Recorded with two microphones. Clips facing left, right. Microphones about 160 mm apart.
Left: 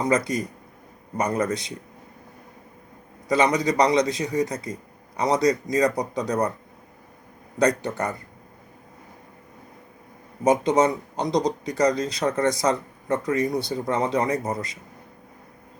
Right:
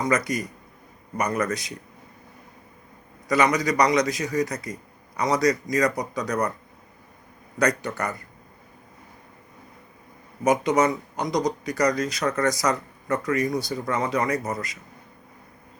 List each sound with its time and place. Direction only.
0.0 s speech: 30° left (ahead or behind)
3.2 s speech: 25° left (ahead or behind)
7.6 s speech: 30° left (ahead or behind)
10.4 s speech: 30° left (ahead or behind)